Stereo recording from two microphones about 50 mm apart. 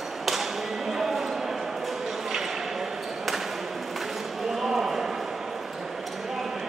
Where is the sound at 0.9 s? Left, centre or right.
Centre.